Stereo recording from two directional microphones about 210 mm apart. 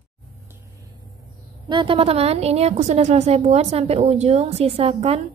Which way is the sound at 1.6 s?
20° right (ahead or behind).